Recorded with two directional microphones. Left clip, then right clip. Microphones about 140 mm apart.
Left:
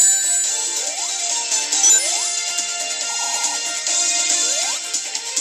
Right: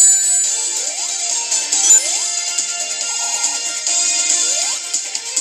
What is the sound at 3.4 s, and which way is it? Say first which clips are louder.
Music: right 2 dB; 25° right (ahead or behind).